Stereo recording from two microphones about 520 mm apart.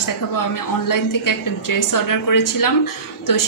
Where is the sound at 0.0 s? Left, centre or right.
Left.